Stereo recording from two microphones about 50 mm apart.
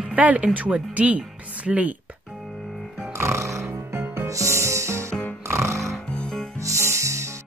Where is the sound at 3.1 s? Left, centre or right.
Right.